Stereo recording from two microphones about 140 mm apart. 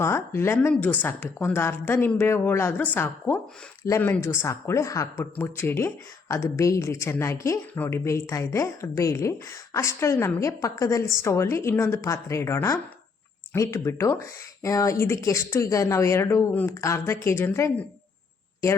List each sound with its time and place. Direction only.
0.0 s a woman's voice: 20° left (ahead or behind)